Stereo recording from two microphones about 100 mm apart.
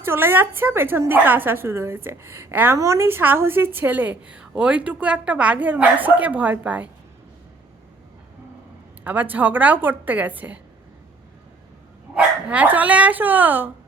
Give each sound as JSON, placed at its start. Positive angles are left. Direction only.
{"t": 0.0, "sound": "a woman's voice", "side_deg": -25}
{"t": 9.0, "sound": "a woman's voice", "side_deg": -15}
{"t": 12.1, "sound": "a woman's voice", "side_deg": -15}